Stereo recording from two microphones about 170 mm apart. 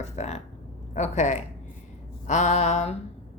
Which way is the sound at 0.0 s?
40° left (ahead or behind).